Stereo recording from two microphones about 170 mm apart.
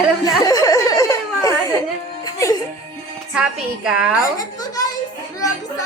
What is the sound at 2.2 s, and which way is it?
Music, 25° left (ahead or behind).